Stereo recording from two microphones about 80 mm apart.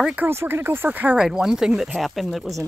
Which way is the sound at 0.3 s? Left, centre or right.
Right.